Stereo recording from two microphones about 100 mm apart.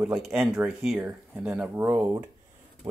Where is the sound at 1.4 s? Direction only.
10° right (ahead or behind).